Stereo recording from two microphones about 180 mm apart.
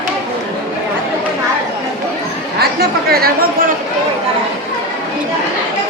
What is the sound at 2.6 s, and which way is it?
Chatter, 60° right (ahead or behind).